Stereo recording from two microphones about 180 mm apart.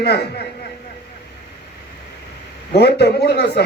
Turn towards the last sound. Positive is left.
turn(degrees=65)  # may be behind; listen again after turning